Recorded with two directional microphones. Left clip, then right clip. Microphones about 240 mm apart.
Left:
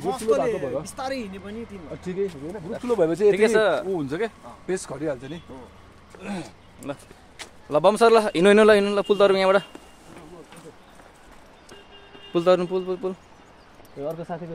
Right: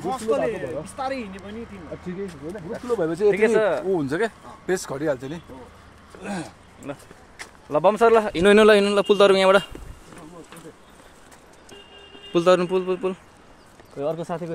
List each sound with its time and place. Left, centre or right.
0.1 s speech: left
3.0 s speech: left
3.9 s speech: right
4.6 s speech: right
6.8 s speech: centre
8.5 s speech: centre
12.3 s a man's voice: centre